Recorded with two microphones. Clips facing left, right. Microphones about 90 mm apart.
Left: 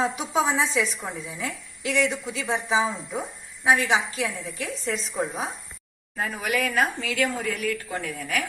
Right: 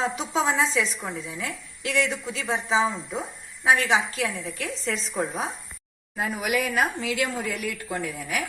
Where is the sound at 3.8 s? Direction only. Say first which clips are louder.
Even; 20° left (ahead or behind).